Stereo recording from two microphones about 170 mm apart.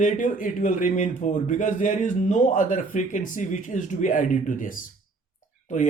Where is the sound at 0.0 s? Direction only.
50° left (ahead or behind).